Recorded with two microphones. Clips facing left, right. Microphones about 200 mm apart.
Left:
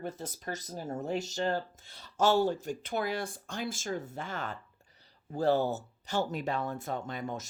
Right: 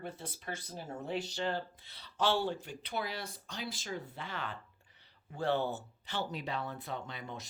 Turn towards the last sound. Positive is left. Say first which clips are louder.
# left 7 dB
turn(degrees=45)  # may be behind; listen again after turning